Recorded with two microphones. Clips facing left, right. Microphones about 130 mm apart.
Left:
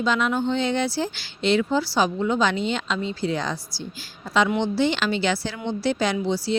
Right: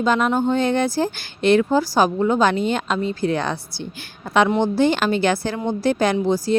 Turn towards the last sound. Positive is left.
turn(degrees=-45)  # may be behind; listen again after turning